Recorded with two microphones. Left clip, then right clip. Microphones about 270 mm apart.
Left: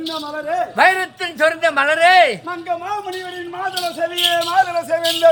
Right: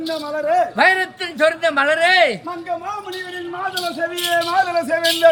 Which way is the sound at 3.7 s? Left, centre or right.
Centre.